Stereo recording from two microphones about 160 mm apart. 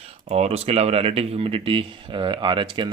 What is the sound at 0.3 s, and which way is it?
Speech, 40° right (ahead or behind).